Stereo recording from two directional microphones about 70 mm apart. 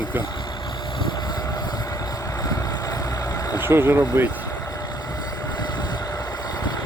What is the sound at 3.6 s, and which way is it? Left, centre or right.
Speech, right.